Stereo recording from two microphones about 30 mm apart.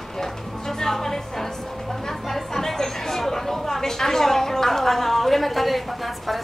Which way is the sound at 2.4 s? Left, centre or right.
Centre.